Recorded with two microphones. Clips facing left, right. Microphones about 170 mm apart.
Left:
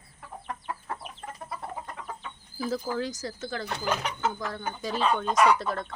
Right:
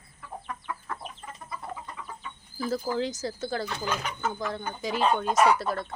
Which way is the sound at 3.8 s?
70° left (ahead or behind).